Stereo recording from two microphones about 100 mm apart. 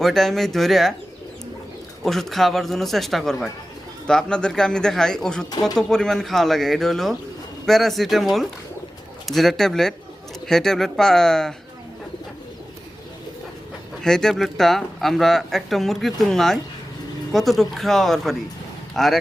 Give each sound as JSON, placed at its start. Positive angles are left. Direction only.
{"t": 0.0, "sound": "speech", "side_deg": 5}
{"t": 2.0, "sound": "speech", "side_deg": 5}
{"t": 5.5, "sound": "speech", "side_deg": 40}
{"t": 5.7, "sound": "speech", "side_deg": 5}
{"t": 14.0, "sound": "speech", "side_deg": 5}